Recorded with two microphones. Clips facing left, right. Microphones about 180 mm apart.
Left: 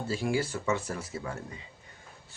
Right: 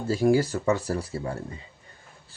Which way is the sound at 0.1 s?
40° right (ahead or behind).